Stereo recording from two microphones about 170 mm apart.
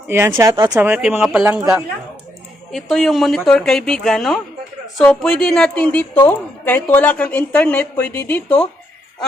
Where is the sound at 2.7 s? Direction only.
Centre (ahead or behind).